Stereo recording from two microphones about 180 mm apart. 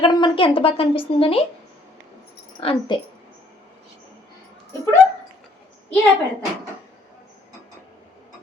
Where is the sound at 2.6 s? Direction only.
30° left (ahead or behind).